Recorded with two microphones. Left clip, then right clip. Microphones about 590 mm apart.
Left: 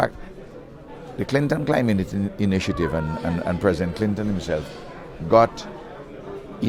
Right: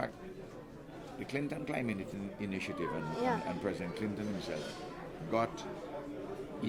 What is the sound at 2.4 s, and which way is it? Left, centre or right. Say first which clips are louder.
Speech: left 15 dB; left.